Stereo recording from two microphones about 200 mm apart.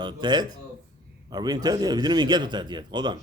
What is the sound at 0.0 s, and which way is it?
A man's voice, 20° right (ahead or behind).